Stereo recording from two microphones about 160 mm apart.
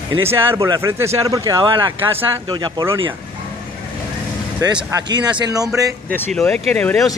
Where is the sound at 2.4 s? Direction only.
30° right (ahead or behind).